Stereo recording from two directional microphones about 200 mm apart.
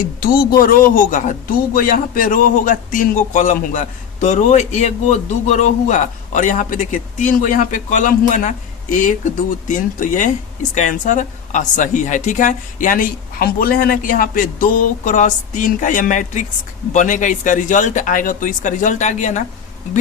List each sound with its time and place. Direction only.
0.2 s a man's voice: 45° left (ahead or behind)